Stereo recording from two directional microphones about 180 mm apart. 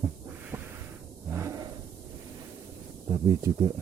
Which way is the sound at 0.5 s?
15° right (ahead or behind).